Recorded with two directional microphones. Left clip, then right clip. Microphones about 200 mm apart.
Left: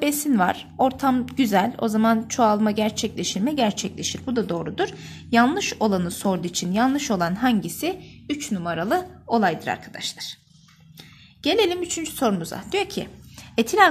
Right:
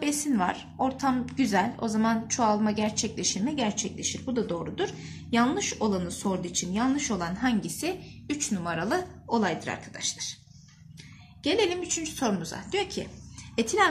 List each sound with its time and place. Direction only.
0.0 s a woman's voice: 50° left (ahead or behind)
11.4 s a woman's voice: 50° left (ahead or behind)